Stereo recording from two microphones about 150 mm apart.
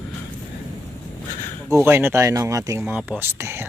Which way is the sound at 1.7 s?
15° right (ahead or behind).